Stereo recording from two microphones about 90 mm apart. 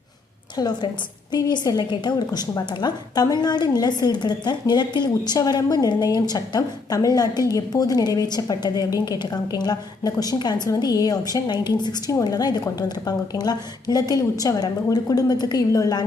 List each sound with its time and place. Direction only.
0.5 s a woman's voice: 45° left (ahead or behind)